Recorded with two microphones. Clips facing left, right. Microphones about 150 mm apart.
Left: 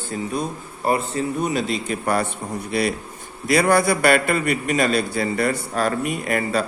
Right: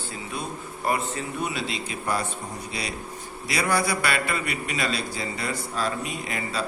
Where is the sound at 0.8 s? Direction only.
30° left (ahead or behind).